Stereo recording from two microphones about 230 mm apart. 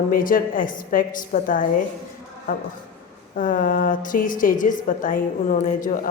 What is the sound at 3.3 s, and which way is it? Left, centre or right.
Speech, left.